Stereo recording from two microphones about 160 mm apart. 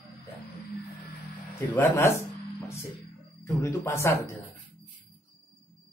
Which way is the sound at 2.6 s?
15° left (ahead or behind).